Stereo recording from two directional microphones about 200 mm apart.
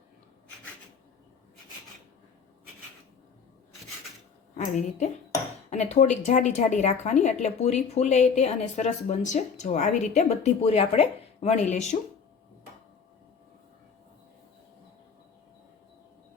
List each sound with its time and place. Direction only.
4.5 s a woman's voice: 35° left (ahead or behind)